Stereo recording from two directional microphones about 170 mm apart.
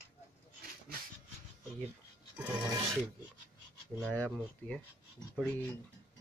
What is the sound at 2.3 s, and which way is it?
Music, 20° right (ahead or behind).